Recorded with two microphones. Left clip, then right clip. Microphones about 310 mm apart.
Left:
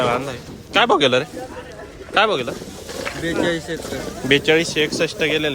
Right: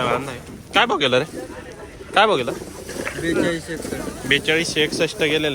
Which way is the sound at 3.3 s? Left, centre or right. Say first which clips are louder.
Left 1 dB; centre.